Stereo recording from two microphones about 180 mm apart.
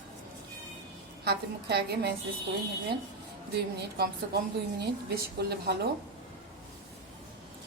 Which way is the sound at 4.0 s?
65° right (ahead or behind).